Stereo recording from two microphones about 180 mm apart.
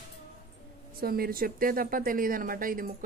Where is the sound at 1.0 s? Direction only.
55° right (ahead or behind).